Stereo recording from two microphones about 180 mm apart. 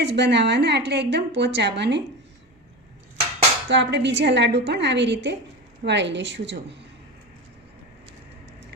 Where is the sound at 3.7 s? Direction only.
75° right (ahead or behind).